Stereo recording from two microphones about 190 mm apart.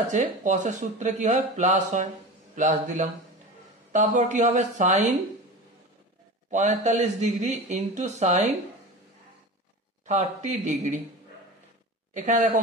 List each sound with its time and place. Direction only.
0.1 s a man's voice: 40° right (ahead or behind)
6.5 s a man's voice: 35° right (ahead or behind)
10.0 s a man's voice: 40° right (ahead or behind)
12.1 s speech: 40° right (ahead or behind)